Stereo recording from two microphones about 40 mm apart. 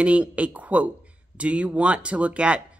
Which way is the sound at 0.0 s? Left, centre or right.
Right.